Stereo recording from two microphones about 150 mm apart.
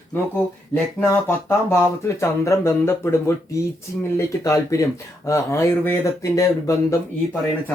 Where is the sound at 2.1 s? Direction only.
20° left (ahead or behind).